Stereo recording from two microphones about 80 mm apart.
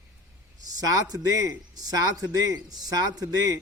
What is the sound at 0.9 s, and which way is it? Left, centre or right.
A man's voice, right.